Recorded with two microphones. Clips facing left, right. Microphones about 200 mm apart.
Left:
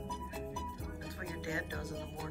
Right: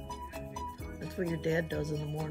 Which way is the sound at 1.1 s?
25° right (ahead or behind).